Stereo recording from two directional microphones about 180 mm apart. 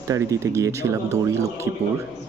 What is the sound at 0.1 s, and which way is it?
A man's voice, 15° right (ahead or behind).